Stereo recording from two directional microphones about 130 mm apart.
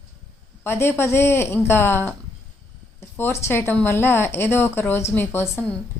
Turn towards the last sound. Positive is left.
turn(degrees=15)  # may be behind; listen again after turning